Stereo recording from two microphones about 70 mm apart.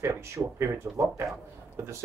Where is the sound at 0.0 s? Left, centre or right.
Right.